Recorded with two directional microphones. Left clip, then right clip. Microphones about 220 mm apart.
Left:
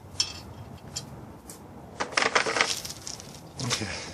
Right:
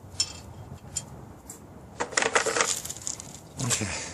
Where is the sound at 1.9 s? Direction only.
20° right (ahead or behind).